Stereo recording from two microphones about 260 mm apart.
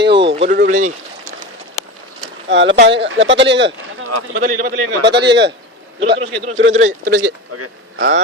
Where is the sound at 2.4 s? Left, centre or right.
Right.